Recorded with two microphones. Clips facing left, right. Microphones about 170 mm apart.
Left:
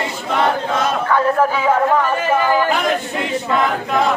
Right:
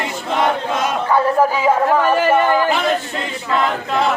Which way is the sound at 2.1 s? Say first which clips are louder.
Right 3 dB; 70° right (ahead or behind).